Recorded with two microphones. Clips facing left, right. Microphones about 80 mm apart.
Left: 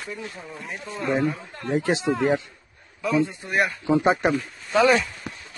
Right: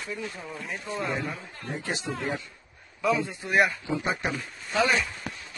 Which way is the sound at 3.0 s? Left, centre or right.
Centre.